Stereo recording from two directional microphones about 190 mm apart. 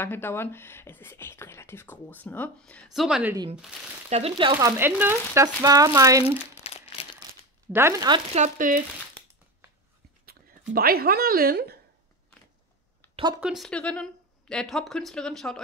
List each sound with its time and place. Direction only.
0.0 s speech: 10° left (ahead or behind); by 3.3 s 5° right (ahead or behind)
4.1 s speech: 30° right (ahead or behind)
6.6 s crumpling: 30° left (ahead or behind)
7.7 s speech: 15° right (ahead or behind)
8.4 s a woman's voice: 45° right (ahead or behind)
10.7 s a woman's voice: 50° right (ahead or behind)
13.1 s a sound: 25° right (ahead or behind)
13.4 s speech: centre (ahead or behind)